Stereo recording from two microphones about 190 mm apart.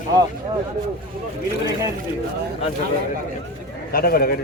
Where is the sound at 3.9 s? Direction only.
50° left (ahead or behind).